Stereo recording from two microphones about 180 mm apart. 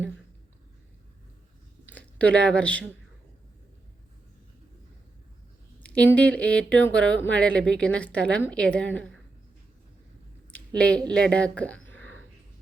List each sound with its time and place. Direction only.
1.9 s speech: 5° left (ahead or behind)
5.8 s speech: 5° left (ahead or behind)
10.8 s speech: 5° left (ahead or behind)